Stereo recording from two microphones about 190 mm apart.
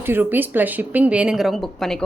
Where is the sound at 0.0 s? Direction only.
10° right (ahead or behind).